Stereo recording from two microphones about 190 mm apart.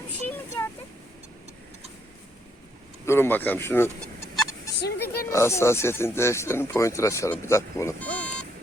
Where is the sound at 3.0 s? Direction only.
10° left (ahead or behind).